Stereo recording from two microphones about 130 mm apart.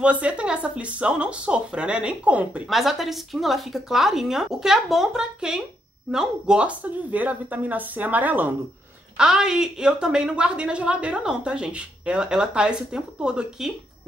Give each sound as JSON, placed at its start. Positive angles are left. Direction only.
{"t": 0.0, "sound": "a woman's voice", "side_deg": -10}